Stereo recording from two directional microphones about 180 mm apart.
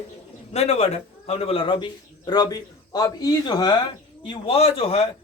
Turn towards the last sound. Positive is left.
turn(degrees=35)  # may be behind; listen again after turning